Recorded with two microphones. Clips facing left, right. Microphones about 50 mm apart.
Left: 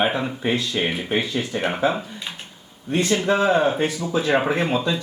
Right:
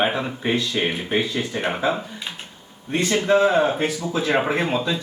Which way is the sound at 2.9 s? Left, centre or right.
Right.